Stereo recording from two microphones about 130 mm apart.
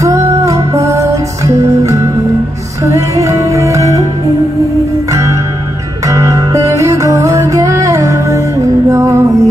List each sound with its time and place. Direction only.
0.0 s music: 25° right (ahead or behind)
6.0 s music: 25° right (ahead or behind)